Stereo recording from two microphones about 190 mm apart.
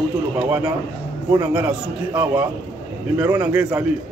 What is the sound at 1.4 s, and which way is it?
Speech, 5° right (ahead or behind).